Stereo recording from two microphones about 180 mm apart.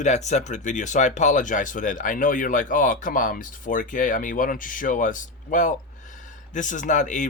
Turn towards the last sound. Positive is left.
turn(degrees=45)  # may be behind; listen again after turning